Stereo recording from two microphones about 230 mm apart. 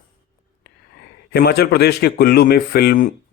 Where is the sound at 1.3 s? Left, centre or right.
Left.